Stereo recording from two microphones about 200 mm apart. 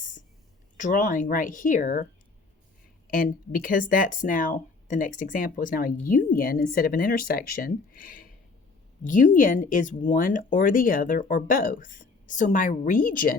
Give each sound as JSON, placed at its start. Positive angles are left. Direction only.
{"t": 0.8, "sound": "speech", "side_deg": 40}
{"t": 3.1, "sound": "speech", "side_deg": 45}